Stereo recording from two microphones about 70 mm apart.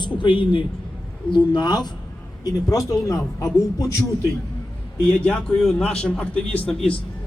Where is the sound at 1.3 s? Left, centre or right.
Left.